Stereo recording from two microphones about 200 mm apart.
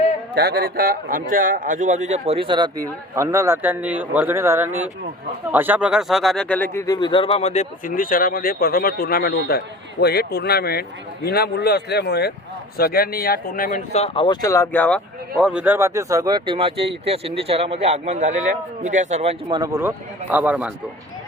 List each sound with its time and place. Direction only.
0.3 s a man's voice: 50° right (ahead or behind); by 19.3 s 35° right (ahead or behind)
19.5 s speech: 20° right (ahead or behind)